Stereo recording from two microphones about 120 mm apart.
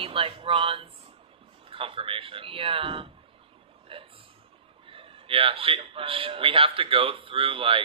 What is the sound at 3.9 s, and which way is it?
Chuckle, 45° right (ahead or behind).